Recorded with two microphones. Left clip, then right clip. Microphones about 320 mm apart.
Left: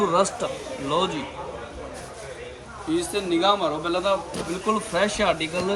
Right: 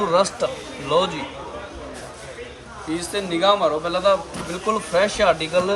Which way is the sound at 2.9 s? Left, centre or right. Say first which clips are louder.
Left 1 dB; right.